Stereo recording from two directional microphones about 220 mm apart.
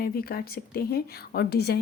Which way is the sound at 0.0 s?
45° left (ahead or behind).